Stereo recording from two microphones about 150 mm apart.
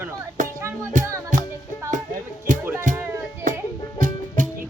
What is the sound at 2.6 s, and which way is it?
Music, 15° right (ahead or behind).